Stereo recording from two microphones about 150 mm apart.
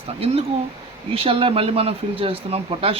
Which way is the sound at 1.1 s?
40° right (ahead or behind).